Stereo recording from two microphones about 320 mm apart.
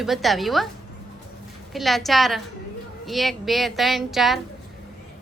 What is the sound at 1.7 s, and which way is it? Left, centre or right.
A woman's voice, centre.